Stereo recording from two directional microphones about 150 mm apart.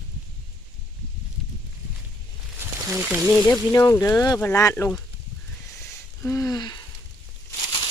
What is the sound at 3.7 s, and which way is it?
Speech, 15° left (ahead or behind).